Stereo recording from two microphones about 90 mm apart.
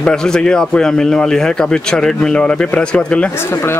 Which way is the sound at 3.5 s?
25° left (ahead or behind).